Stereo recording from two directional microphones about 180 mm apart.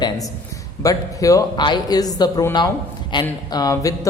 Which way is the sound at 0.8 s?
20° left (ahead or behind).